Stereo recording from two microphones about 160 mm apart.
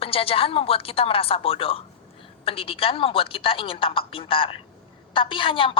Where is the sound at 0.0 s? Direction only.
35° left (ahead or behind).